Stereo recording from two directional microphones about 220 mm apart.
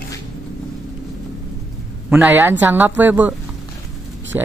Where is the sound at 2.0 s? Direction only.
10° right (ahead or behind).